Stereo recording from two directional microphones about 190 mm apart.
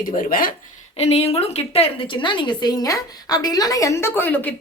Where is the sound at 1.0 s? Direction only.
35° left (ahead or behind); by 4.5 s 10° left (ahead or behind).